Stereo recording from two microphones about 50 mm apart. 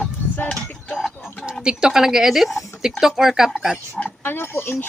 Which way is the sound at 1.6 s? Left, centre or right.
Centre.